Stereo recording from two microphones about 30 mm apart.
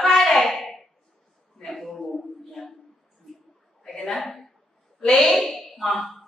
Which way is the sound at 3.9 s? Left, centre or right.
Centre.